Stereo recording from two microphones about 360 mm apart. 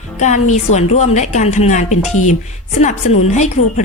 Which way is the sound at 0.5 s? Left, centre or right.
Centre.